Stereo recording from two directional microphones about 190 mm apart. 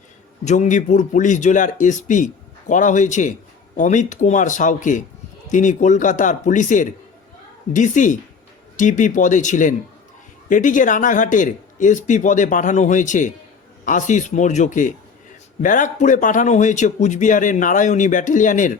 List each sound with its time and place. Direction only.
0.4 s speech: 40° left (ahead or behind)